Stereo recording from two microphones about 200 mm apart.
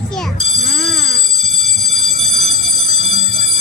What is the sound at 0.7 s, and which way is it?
Alarm, centre (ahead or behind).